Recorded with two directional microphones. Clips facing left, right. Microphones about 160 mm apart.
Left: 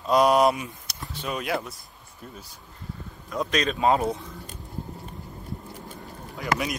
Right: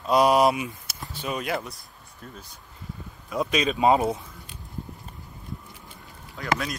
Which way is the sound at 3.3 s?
5° right (ahead or behind).